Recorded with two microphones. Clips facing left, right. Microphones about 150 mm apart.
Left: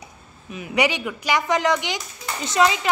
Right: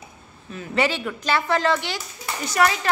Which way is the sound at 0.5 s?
15° left (ahead or behind).